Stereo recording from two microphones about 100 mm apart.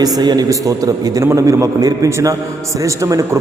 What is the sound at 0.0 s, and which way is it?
A man's voice, 45° right (ahead or behind).